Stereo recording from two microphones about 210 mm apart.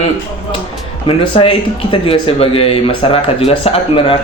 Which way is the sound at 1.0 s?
25° left (ahead or behind).